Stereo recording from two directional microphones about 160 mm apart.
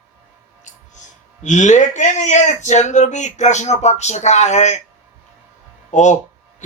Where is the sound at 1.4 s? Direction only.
50° left (ahead or behind).